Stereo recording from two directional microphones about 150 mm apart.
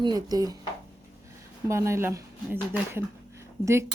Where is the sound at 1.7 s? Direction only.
20° right (ahead or behind).